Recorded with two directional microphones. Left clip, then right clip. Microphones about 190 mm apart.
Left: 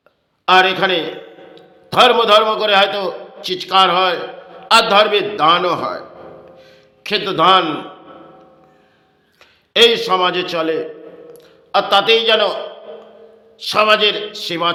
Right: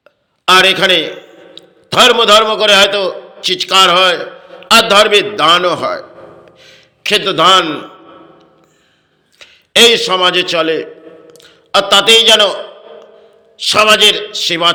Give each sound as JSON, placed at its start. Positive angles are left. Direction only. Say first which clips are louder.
{"t": 0.4, "sound": "a man's voice", "louder": "right 4 dB", "side_deg": -10}
{"t": 9.4, "sound": "a man's voice", "louder": "right 4 dB", "side_deg": -10}
{"t": 13.6, "sound": "a man's voice", "louder": "right 5 dB", "side_deg": -10}